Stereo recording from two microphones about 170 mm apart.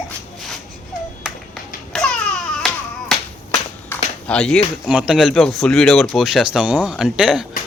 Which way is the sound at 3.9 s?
10° left (ahead or behind).